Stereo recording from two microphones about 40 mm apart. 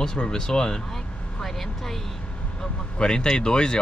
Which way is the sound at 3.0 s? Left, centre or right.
Centre.